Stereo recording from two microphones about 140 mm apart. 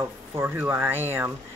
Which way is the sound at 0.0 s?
15° right (ahead or behind).